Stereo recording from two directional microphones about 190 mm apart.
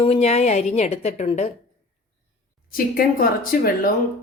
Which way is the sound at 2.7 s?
50° left (ahead or behind).